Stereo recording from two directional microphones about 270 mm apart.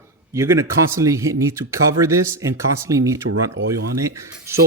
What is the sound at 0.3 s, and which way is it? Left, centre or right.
Speech, centre.